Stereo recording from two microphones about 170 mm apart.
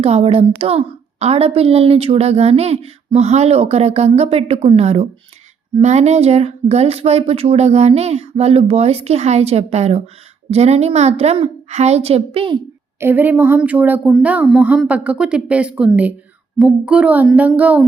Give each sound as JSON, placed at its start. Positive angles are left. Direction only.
{"t": 0.0, "sound": "a woman's voice", "side_deg": -35}
{"t": 13.0, "sound": "speech", "side_deg": -10}